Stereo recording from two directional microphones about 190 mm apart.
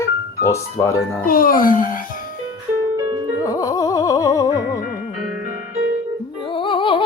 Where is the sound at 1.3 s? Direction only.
50° left (ahead or behind).